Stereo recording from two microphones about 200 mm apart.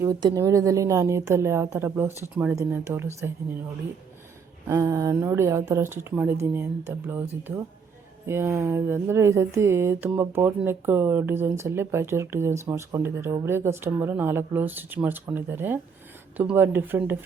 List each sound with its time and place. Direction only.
0.0 s speech: 20° right (ahead or behind)
4.6 s speech: 15° right (ahead or behind)